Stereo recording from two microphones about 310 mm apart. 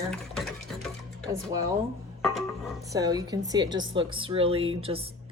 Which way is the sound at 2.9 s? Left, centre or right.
Centre.